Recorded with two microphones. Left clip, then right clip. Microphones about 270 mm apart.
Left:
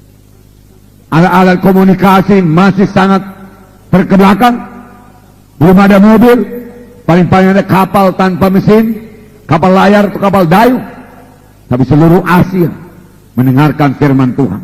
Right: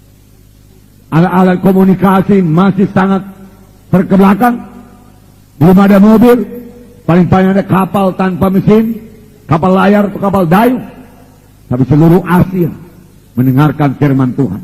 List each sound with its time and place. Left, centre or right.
1.1 s a man's voice: left